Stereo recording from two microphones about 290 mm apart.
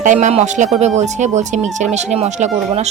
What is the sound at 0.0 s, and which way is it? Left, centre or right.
Speech, right.